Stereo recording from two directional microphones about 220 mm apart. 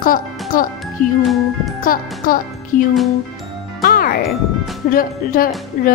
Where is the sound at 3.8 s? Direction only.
40° left (ahead or behind).